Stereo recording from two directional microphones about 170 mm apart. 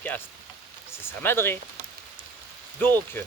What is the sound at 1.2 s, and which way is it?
Speech, 15° left (ahead or behind).